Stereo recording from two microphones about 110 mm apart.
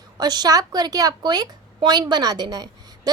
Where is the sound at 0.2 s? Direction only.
40° right (ahead or behind).